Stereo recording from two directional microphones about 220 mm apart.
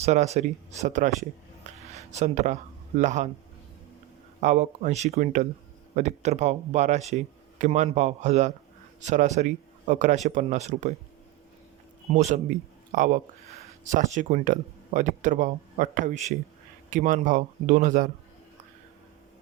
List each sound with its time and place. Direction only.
0.0 s speech: 30° right (ahead or behind)
1.6 s a sound: 30° right (ahead or behind)
4.4 s speech: 30° right (ahead or behind)
12.1 s speech: 35° right (ahead or behind)